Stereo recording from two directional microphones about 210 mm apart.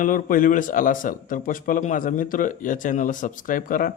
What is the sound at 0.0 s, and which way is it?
A man's voice, 40° left (ahead or behind).